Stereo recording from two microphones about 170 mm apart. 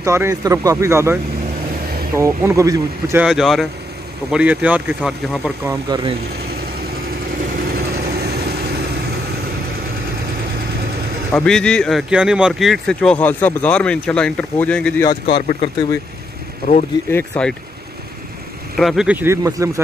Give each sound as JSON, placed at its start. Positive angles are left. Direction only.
{"t": 0.0, "sound": "speech", "side_deg": -15}
{"t": 2.1, "sound": "speech", "side_deg": -15}
{"t": 3.3, "sound": "speech", "side_deg": 0}
{"t": 5.9, "sound": "speech", "side_deg": -25}
{"t": 7.5, "sound": "vehicle", "side_deg": -60}
{"t": 11.3, "sound": "speech", "side_deg": 5}
{"t": 15.0, "sound": "speech", "side_deg": 30}
{"t": 17.1, "sound": "speech", "side_deg": 10}
{"t": 18.8, "sound": "speech", "side_deg": 0}